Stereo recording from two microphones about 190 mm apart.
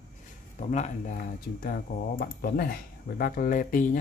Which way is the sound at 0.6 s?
40° left (ahead or behind).